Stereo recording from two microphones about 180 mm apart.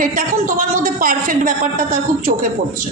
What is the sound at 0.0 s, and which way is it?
A woman's voice, 50° right (ahead or behind).